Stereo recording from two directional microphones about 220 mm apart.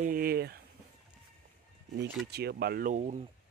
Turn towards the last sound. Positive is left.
turn(degrees=-30)  # may be behind; listen again after turning